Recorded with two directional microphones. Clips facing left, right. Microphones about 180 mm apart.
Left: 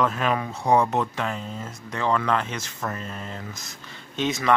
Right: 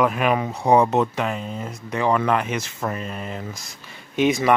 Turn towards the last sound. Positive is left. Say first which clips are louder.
# right 4 dB
turn(degrees=-15)  # may be behind; listen again after turning